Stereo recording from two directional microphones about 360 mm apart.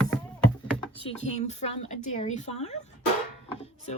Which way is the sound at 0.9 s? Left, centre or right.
Centre.